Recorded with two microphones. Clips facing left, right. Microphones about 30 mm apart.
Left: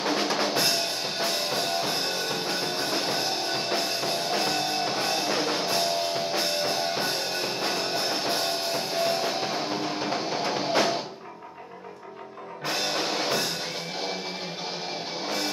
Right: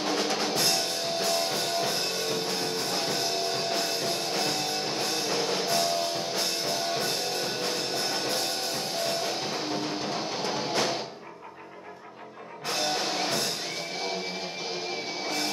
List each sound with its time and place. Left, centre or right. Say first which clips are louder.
0.0 s music: left 2 dB; centre
12.6 s music: left 1 dB; centre